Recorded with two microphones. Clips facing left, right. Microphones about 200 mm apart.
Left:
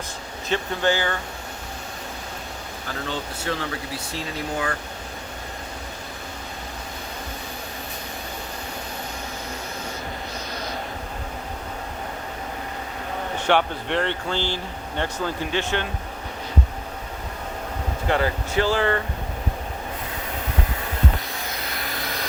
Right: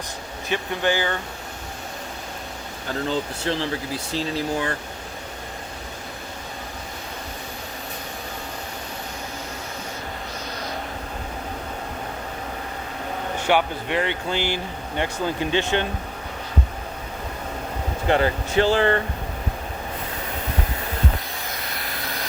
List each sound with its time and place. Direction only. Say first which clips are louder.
0.4 s speech: left 1 dB; 15° right (ahead or behind)
3.1 s speech: right 3 dB; 30° right (ahead or behind)
13.4 s speech: even; 10° right (ahead or behind)
18.1 s speech: right 3 dB; 25° right (ahead or behind)
21.6 s vacuum cleaner: left 1 dB; centre (ahead or behind)